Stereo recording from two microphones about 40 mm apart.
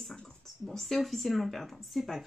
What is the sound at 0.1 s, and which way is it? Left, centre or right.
Speech, centre.